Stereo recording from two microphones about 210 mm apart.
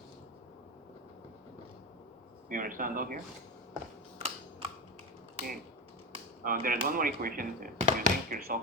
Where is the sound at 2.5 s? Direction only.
40° right (ahead or behind).